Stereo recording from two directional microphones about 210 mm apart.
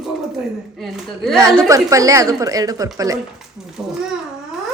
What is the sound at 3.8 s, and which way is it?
Speech, 5° right (ahead or behind).